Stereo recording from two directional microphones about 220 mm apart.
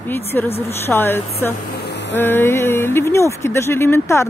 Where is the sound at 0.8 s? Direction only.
10° left (ahead or behind).